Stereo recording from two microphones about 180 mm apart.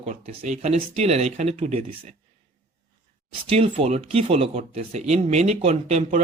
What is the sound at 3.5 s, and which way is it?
Speech, 35° right (ahead or behind).